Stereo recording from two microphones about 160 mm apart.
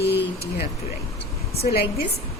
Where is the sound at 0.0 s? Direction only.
90° left.